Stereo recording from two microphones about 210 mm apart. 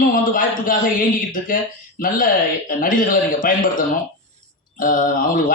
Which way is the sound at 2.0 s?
40° left (ahead or behind).